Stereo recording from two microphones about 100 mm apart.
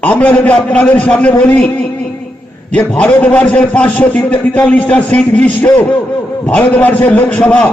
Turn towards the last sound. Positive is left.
turn(degrees=10)  # may be behind; listen again after turning